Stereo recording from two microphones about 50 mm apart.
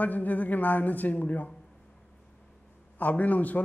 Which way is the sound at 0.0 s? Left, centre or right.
Left.